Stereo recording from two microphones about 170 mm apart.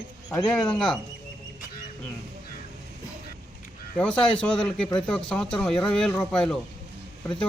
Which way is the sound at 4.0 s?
5° left (ahead or behind).